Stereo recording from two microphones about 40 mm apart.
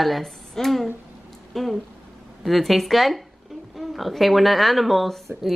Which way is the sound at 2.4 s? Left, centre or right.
Centre.